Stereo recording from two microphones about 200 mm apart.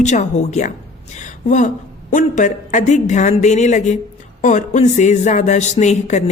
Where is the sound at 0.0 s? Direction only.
35° left (ahead or behind).